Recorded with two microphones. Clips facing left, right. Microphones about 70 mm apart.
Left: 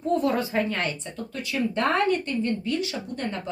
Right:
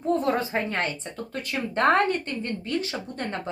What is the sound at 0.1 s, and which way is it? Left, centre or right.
A woman's voice, right.